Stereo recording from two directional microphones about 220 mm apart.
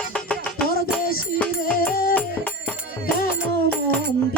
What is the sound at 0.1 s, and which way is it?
Music, 5° left (ahead or behind).